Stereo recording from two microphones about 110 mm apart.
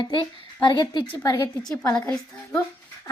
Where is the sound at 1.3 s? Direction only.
25° left (ahead or behind).